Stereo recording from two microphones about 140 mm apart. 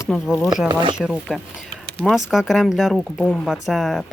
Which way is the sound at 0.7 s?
35° right (ahead or behind).